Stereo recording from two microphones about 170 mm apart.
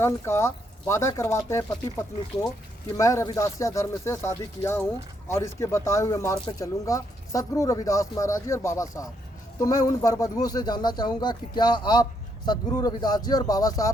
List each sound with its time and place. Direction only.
0.0 s speech: 15° left (ahead or behind)